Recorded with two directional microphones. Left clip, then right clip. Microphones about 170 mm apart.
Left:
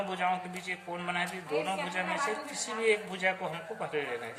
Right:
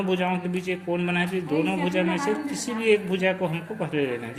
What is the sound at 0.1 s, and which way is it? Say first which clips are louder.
A man's voice: right 6 dB; 20° right (ahead or behind).